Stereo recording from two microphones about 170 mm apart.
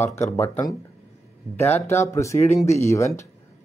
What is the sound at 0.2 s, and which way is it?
Speech, 20° left (ahead or behind).